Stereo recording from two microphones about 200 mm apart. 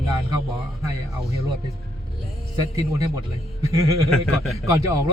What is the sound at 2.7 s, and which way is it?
Speech, 15° right (ahead or behind).